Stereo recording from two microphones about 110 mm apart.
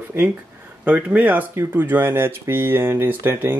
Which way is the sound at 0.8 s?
15° right (ahead or behind).